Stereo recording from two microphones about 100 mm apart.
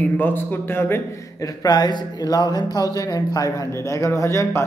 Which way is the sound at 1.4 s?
40° left (ahead or behind).